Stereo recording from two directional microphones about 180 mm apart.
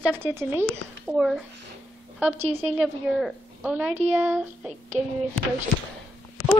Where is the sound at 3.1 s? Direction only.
5° right (ahead or behind).